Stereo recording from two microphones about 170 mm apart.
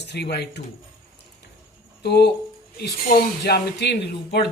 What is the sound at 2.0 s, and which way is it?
Speech, 70° left (ahead or behind).